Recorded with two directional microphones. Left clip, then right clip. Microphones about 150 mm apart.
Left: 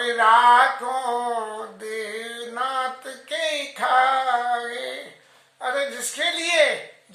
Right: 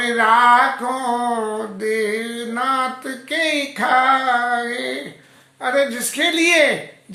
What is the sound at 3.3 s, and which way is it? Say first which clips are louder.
Speech: right 6 dB; 15° right (ahead or behind).